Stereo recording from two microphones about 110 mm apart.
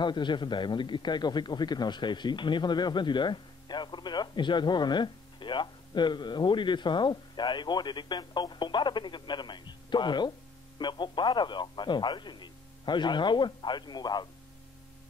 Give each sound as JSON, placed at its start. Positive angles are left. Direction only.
{"t": 0.0, "sound": "a man's voice", "side_deg": 45}